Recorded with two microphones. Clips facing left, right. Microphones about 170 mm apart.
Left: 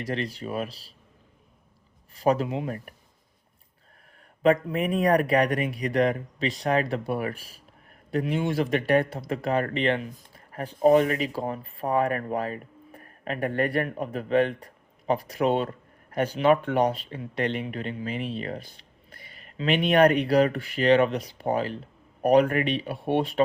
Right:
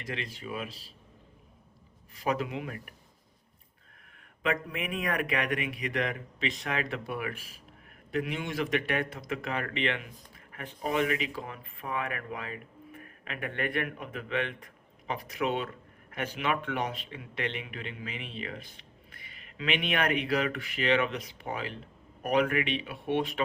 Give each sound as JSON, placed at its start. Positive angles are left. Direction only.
{"t": 0.0, "sound": "speech", "side_deg": 35}
{"t": 2.1, "sound": "speech", "side_deg": 35}
{"t": 4.4, "sound": "speech", "side_deg": 35}